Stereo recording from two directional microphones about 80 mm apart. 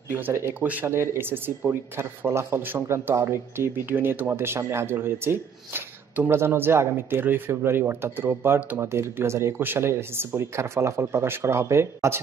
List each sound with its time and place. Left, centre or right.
0.1 s speech: right
0.6 s speech: right